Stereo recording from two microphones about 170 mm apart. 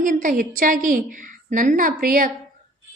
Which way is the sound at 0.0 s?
50° right (ahead or behind).